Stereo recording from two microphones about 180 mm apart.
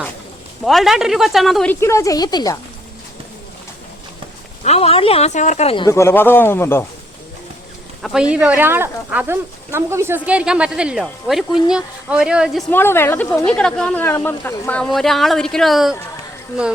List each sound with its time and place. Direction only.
0.6 s speech: centre (ahead or behind)
1.7 s speech: 15° left (ahead or behind)
4.6 s speech: 35° left (ahead or behind)
5.9 s speech: 15° left (ahead or behind)
8.0 s speech: 5° right (ahead or behind)
12.7 s speech: 10° left (ahead or behind)